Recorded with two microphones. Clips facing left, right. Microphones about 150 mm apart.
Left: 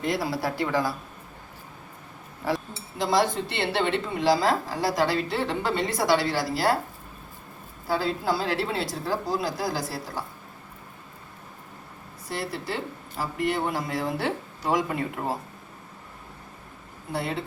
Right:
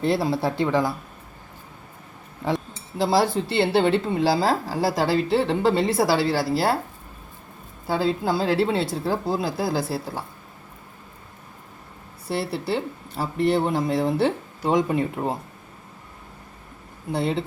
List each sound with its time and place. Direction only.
0.0 s a woman's voice: 30° right (ahead or behind)
2.4 s chink: 20° right (ahead or behind)
3.0 s a woman's voice: 30° right (ahead or behind)
7.9 s a woman's voice: 25° right (ahead or behind)
12.3 s a woman's voice: 30° right (ahead or behind)
17.1 s a woman's voice: 25° right (ahead or behind)